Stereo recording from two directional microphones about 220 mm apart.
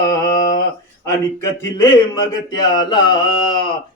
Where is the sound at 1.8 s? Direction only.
15° left (ahead or behind).